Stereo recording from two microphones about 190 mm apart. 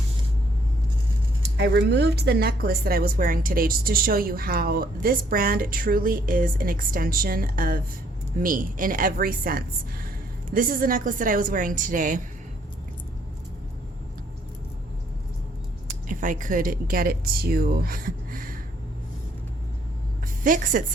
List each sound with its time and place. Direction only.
1.5 s a woman's voice: 65° right (ahead or behind); by 12.2 s 45° right (ahead or behind)
16.0 s a woman's voice: 45° right (ahead or behind)
20.4 s a woman's voice: 45° right (ahead or behind)